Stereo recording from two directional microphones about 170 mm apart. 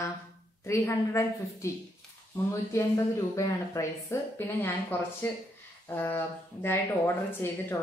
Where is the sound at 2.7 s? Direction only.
20° left (ahead or behind).